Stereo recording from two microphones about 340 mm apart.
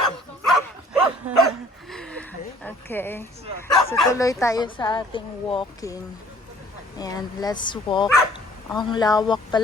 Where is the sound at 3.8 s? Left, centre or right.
Centre.